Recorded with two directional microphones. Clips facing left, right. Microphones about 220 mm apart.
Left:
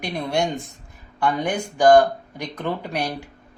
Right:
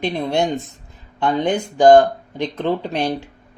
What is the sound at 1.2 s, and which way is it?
Speech, 20° right (ahead or behind).